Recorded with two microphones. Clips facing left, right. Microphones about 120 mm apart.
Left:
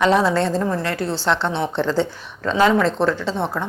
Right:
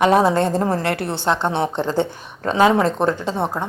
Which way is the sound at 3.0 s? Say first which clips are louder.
Even; 15° right (ahead or behind).